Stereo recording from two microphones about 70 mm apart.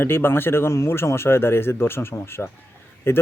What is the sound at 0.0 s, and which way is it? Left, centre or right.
Speech, left.